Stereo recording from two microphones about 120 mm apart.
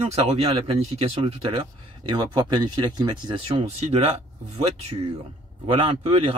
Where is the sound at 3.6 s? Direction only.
60° right (ahead or behind).